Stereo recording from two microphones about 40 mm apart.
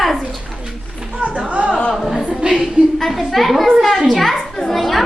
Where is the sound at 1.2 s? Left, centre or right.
Right.